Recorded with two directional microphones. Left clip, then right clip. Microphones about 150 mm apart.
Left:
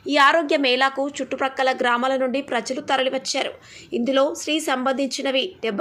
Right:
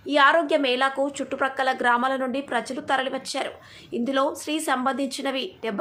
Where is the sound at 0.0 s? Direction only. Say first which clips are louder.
Left 2 dB; 20° left (ahead or behind).